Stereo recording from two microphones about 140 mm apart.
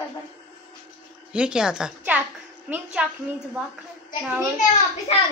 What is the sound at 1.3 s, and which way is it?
A woman's voice, 5° right (ahead or behind).